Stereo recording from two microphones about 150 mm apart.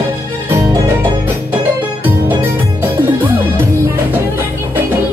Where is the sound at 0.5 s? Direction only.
15° right (ahead or behind).